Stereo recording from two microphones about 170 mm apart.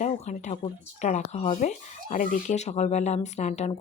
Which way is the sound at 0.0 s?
45° left (ahead or behind).